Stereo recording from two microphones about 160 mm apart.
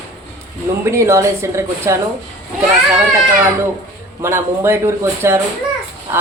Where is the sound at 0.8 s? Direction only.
15° right (ahead or behind).